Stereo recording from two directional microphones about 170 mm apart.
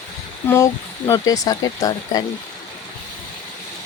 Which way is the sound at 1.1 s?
20° left (ahead or behind).